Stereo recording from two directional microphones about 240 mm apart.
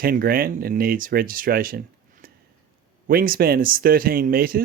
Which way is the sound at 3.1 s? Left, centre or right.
Right.